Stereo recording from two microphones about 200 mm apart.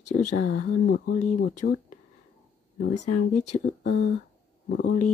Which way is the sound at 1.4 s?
40° left (ahead or behind).